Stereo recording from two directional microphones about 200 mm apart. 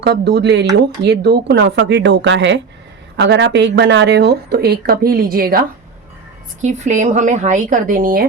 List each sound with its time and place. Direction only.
0.0 s speech: 55° right (ahead or behind)
6.6 s speech: 35° right (ahead or behind)